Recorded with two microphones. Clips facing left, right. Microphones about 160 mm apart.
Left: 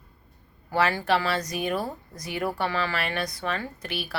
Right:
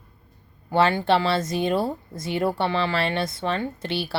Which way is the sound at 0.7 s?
25° right (ahead or behind).